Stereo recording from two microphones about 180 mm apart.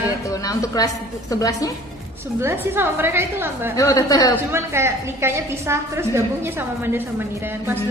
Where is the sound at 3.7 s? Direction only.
20° left (ahead or behind).